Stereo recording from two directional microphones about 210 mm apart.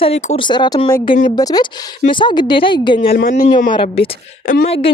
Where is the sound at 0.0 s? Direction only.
30° left (ahead or behind).